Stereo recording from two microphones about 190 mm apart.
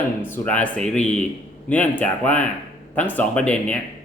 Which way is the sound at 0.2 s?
10° left (ahead or behind).